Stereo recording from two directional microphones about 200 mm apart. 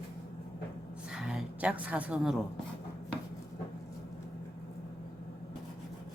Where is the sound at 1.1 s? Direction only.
5° right (ahead or behind).